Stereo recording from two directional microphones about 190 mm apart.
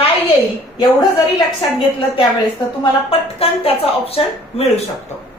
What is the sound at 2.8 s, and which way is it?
Speech, 30° left (ahead or behind).